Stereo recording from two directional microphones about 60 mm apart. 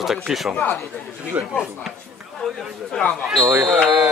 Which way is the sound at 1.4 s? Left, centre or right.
Right.